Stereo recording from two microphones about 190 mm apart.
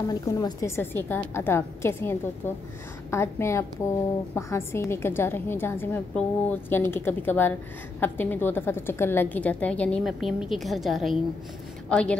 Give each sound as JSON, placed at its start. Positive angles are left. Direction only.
{"t": 0.1, "sound": "a woman's voice", "side_deg": 20}